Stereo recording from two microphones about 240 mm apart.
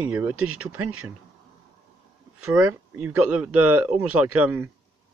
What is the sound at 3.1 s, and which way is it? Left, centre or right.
Speech, centre.